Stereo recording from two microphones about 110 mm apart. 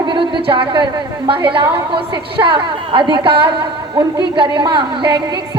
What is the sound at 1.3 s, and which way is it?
A woman's voice, 50° right (ahead or behind).